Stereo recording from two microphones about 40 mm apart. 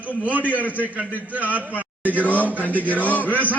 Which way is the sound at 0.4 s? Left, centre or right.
Left.